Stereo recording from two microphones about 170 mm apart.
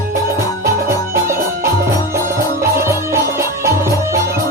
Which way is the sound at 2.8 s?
15° right (ahead or behind).